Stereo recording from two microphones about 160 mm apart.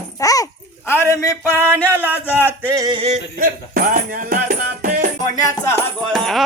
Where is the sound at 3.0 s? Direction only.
40° right (ahead or behind).